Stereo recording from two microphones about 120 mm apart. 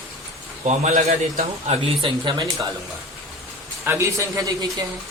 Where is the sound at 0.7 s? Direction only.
70° right (ahead or behind).